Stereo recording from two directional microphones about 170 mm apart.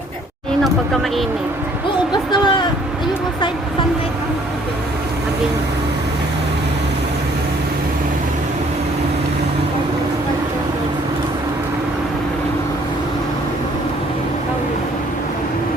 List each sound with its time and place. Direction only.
2.3 s vehicle: 25° left (ahead or behind)